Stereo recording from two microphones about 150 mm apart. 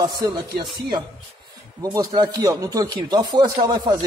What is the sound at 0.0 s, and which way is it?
Speech, 25° right (ahead or behind).